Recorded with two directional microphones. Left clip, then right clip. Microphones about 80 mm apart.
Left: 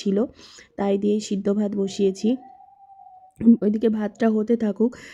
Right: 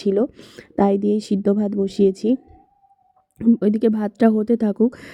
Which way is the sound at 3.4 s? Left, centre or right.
Centre.